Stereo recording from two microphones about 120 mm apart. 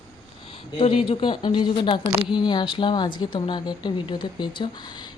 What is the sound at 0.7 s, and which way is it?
A woman's voice, 50° left (ahead or behind).